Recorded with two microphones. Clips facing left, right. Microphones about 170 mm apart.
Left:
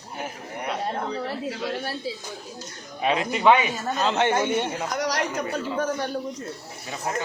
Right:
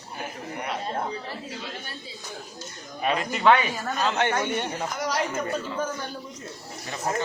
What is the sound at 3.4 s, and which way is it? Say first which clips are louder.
A man's voice: left 1 dB; 15° left (ahead or behind).